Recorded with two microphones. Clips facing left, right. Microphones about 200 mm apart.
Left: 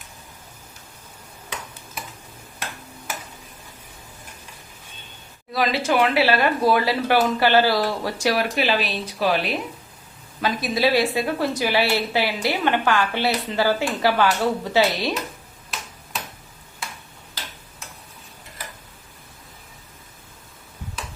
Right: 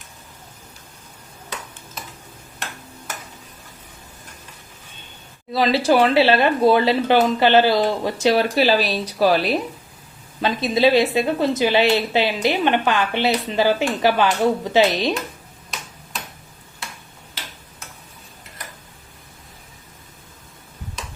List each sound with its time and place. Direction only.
5.5 s a woman's voice: 30° right (ahead or behind)
10.4 s a woman's voice: 25° right (ahead or behind)